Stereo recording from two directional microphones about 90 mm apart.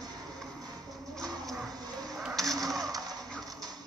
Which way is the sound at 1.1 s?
5° left (ahead or behind).